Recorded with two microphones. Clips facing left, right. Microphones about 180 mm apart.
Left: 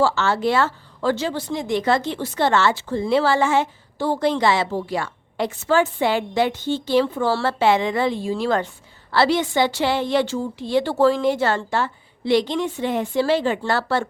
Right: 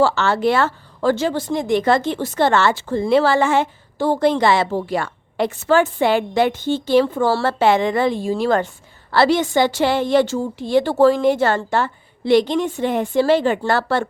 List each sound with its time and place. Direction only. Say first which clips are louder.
0.0 s a woman's voice: right 3 dB; 60° right (ahead or behind)